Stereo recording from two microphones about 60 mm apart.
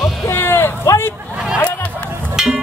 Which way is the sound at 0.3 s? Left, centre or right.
Left.